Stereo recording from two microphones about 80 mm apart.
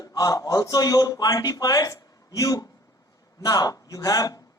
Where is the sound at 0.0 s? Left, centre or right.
Left.